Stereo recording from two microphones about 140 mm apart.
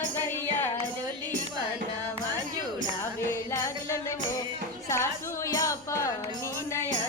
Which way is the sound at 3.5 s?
20° left (ahead or behind).